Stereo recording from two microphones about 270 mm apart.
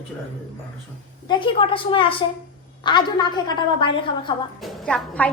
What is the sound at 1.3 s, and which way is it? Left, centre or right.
A woman's voice, centre.